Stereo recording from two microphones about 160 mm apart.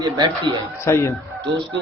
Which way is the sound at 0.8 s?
15° left (ahead or behind).